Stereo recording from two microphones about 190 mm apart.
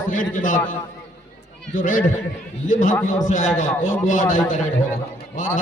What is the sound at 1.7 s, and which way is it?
A man's voice, 45° left (ahead or behind).